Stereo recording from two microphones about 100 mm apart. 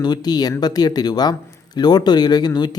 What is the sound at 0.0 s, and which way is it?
Speech, 45° left (ahead or behind).